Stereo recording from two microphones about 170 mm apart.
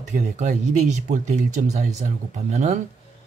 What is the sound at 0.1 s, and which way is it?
Speech, 45° right (ahead or behind).